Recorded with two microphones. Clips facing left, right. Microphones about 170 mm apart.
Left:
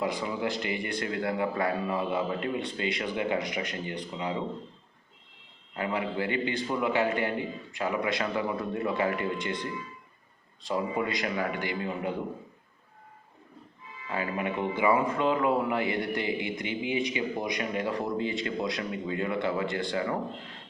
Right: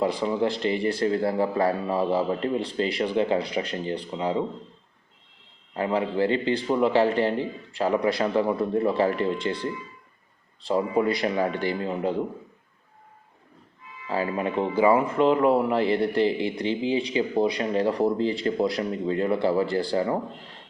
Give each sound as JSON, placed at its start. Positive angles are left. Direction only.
{"t": 0.0, "sound": "speech", "side_deg": -30}
{"t": 5.7, "sound": "speech", "side_deg": -35}
{"t": 10.7, "sound": "speech", "side_deg": -30}
{"t": 14.1, "sound": "speech", "side_deg": -35}